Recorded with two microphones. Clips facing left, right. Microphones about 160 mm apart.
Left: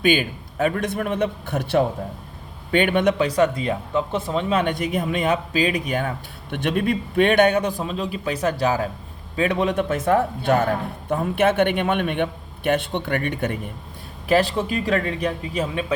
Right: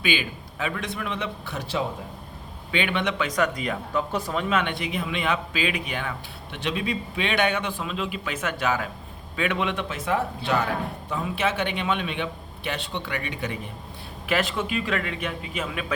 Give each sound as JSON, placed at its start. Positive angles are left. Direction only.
{"t": 0.0, "sound": "a man's voice", "side_deg": 50}
{"t": 4.6, "sound": "a man's voice", "side_deg": 45}
{"t": 14.3, "sound": "speech", "side_deg": 35}